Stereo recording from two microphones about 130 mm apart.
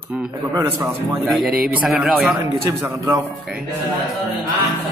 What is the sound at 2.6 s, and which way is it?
Speech, 25° right (ahead or behind).